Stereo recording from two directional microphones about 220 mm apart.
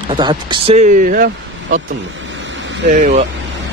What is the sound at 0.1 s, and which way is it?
Speech, 20° right (ahead or behind).